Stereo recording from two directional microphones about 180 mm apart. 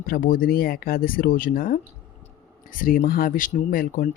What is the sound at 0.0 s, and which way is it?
Speech, 50° left (ahead or behind).